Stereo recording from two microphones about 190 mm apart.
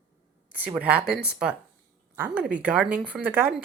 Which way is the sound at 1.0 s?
5° right (ahead or behind).